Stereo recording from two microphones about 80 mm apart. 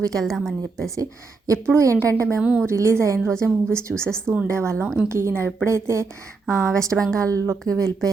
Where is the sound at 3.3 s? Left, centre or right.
Centre.